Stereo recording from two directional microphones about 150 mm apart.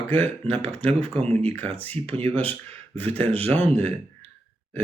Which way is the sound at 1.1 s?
40° right (ahead or behind).